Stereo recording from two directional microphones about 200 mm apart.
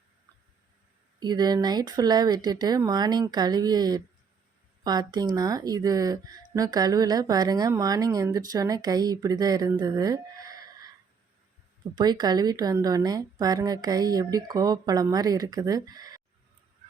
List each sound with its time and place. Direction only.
1.2 s speech: 20° right (ahead or behind)
11.9 s speech: 20° right (ahead or behind)